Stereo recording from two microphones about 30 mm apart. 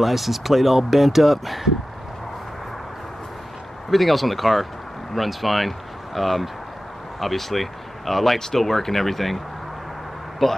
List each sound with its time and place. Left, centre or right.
0.0 s speech: centre
3.9 s speech: centre
10.4 s speech: centre